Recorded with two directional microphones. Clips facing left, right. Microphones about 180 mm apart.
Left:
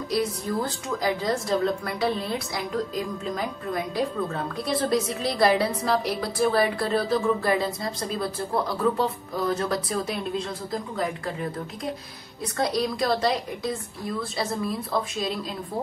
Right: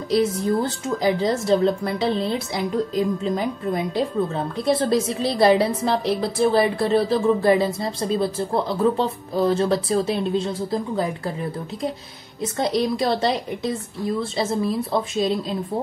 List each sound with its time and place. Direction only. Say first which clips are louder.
0.1 s a woman's voice: right 7 dB; 25° right (ahead or behind)
12.4 s a woman's voice: right 4 dB; 25° right (ahead or behind)